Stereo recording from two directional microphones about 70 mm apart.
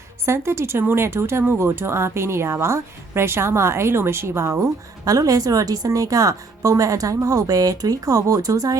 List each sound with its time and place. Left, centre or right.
0.3 s speech: right
5.0 s a woman's voice: right